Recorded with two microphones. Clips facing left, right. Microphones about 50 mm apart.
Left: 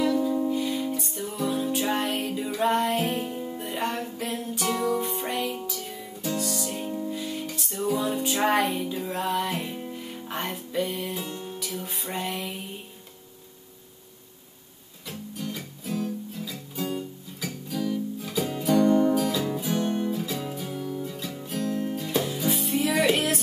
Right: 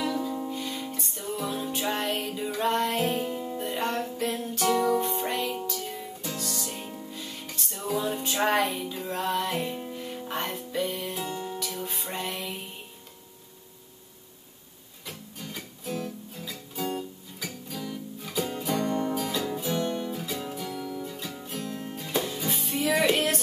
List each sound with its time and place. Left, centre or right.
0.2 s music: centre
15.0 s music: centre
16.0 s guitar: centre
18.4 s music: centre
19.8 s music: centre
20.1 s music: centre
20.6 s music: left
21.0 s music: centre
22.2 s music: centre